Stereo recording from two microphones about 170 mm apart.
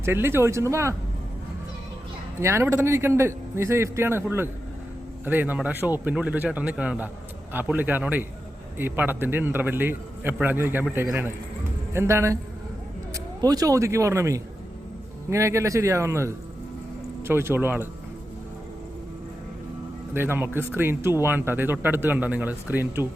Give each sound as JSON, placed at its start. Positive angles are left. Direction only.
{"t": 0.0, "sound": "speech", "side_deg": -15}
{"t": 2.4, "sound": "speech", "side_deg": -15}
{"t": 20.1, "sound": "speech", "side_deg": -15}